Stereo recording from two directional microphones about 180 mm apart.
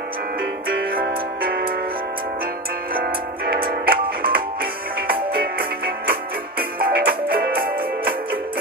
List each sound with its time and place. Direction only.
0.7 s music: 55° right (ahead or behind)
3.5 s music: 55° right (ahead or behind)